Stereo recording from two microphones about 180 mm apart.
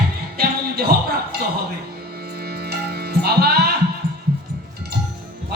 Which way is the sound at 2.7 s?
60° right (ahead or behind).